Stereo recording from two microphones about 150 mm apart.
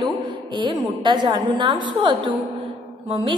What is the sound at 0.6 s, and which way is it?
A woman's voice, 30° right (ahead or behind).